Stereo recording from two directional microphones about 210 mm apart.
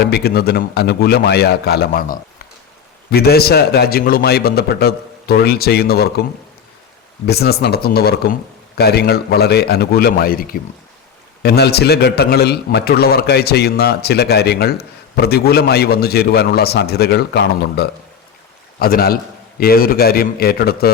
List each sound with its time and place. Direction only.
0.0 s a man's voice: 50° left (ahead or behind)
7.3 s a man's voice: 50° left (ahead or behind)